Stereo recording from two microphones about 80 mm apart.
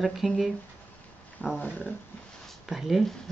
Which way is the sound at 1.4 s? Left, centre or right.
Left.